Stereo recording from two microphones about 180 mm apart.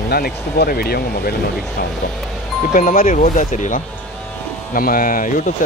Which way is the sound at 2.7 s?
50° left (ahead or behind).